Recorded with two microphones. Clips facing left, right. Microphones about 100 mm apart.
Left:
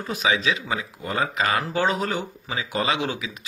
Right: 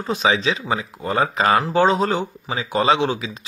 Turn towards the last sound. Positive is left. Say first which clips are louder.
# right 7 dB
turn(degrees=-30)  # may be behind; listen again after turning